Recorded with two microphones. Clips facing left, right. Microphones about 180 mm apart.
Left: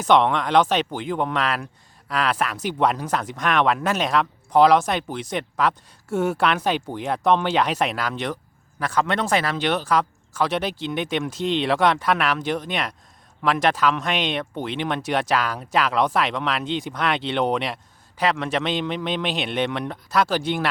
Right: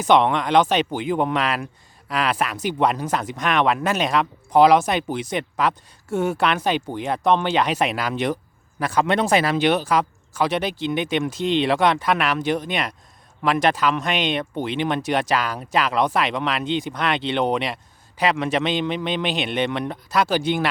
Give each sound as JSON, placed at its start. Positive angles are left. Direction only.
{"t": 0.0, "sound": "speech", "side_deg": 0}